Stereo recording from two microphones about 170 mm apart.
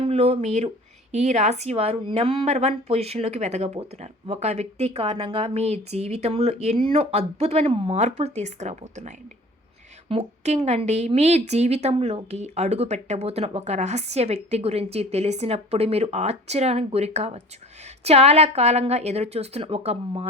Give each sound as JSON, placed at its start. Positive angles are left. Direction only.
{"t": 0.0, "sound": "a woman's voice", "side_deg": -35}